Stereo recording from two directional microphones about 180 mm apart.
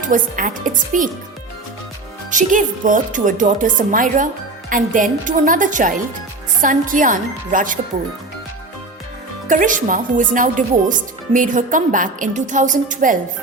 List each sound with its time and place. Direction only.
0.0 s speech: 45° right (ahead or behind)
2.3 s speech: 45° right (ahead or behind)
9.5 s speech: 45° right (ahead or behind)